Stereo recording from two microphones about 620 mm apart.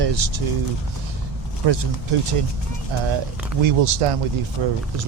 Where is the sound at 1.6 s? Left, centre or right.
Right.